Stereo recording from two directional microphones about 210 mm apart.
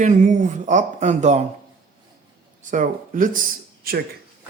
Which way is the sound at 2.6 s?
35° right (ahead or behind).